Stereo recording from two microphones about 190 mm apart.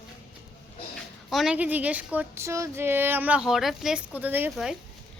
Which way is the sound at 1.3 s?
5° right (ahead or behind).